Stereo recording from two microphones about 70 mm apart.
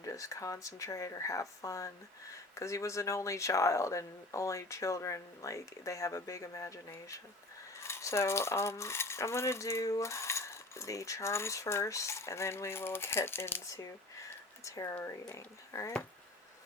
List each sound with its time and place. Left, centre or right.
0.0 s speech: left
13.7 s speech: left